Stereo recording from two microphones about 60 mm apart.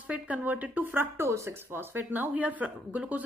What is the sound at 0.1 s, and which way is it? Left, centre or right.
Speech, right.